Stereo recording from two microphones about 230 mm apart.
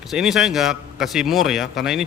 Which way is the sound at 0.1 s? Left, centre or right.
Centre.